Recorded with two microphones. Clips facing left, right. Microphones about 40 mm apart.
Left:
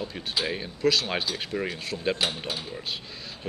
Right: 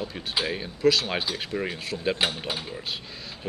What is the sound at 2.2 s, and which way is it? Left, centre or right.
Speech, right.